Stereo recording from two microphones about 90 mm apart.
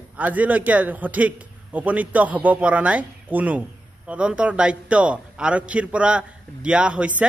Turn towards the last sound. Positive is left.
turn(degrees=-15)  # may be behind; listen again after turning